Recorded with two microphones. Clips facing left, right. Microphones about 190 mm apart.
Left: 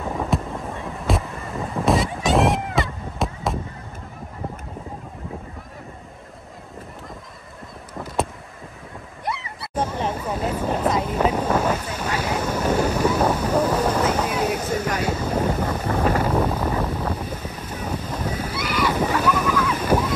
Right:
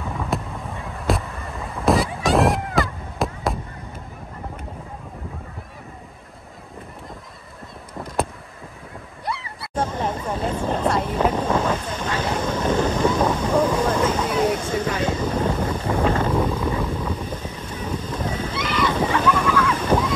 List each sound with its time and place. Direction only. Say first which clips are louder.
0.3 s a sound: left 2 dB; centre (ahead or behind)
9.2 s a sound: left 1 dB; 20° left (ahead or behind)
9.6 s vehicle: right 1 dB; 10° left (ahead or behind)
15.0 s boat: even; 10° left (ahead or behind)
15.8 s boat: right 1 dB; 25° right (ahead or behind)
16.2 s vehicle: even; 10° left (ahead or behind)